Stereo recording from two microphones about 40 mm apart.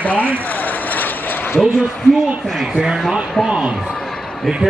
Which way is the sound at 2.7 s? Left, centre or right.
Centre.